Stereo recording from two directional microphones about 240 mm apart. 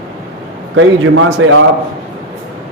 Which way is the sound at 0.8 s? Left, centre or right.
Right.